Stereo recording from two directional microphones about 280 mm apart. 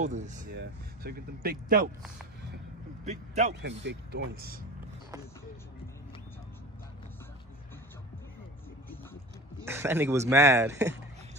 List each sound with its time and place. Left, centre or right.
0.0 s speech: right
3.1 s speech: right
3.6 s speech: right
9.6 s speech: centre